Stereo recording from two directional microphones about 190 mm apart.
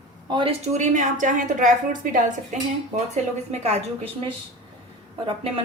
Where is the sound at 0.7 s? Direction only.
40° right (ahead or behind).